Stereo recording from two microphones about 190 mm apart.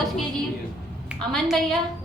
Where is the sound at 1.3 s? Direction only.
Centre (ahead or behind).